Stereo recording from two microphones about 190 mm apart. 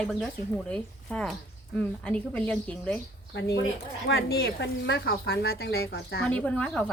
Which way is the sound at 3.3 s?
65° left (ahead or behind).